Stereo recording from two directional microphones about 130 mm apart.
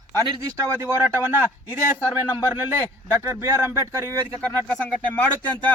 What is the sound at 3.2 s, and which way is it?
Speech, 20° right (ahead or behind).